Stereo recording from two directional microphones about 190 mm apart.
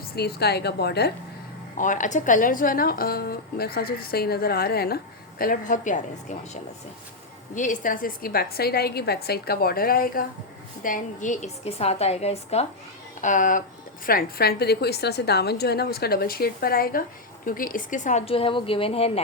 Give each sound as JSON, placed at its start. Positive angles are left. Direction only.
{"t": 0.0, "sound": "a woman's voice", "side_deg": 55}
{"t": 1.8, "sound": "a woman's voice", "side_deg": 40}